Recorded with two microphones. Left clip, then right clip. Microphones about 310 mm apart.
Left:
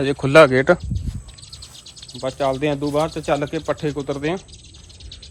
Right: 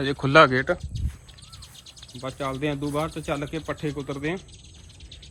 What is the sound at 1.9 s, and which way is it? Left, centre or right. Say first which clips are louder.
Bird: left 6 dB; centre.